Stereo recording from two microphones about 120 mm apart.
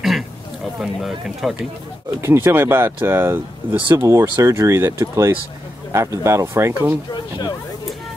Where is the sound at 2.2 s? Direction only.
20° right (ahead or behind).